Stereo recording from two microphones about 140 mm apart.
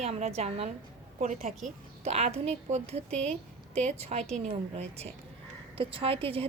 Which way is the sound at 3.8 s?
50° right (ahead or behind).